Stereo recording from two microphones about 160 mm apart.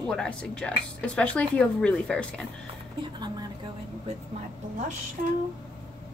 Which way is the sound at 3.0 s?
25° right (ahead or behind).